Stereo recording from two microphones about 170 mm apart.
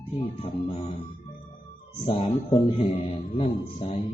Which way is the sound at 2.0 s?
30° left (ahead or behind).